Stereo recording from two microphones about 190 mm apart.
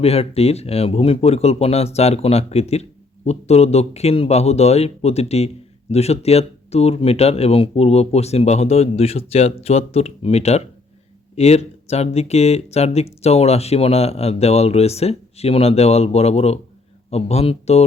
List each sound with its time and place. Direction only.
0.0 s speech: 30° left (ahead or behind)